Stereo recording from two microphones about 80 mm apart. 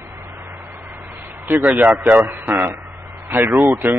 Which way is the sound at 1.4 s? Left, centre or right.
Right.